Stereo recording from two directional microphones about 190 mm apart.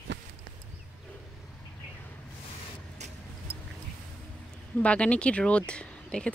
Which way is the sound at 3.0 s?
40° right (ahead or behind).